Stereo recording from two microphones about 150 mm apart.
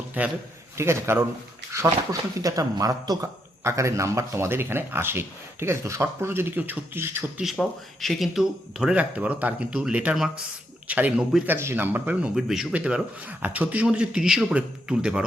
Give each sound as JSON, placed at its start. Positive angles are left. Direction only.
{"t": 0.2, "sound": "speech", "side_deg": -10}